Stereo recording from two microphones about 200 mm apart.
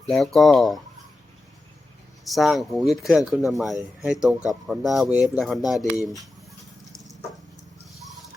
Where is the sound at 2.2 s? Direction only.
Centre (ahead or behind).